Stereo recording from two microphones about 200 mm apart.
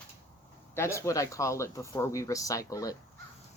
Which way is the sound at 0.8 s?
15° left (ahead or behind).